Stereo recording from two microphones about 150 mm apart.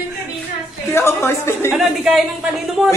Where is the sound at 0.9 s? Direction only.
15° left (ahead or behind).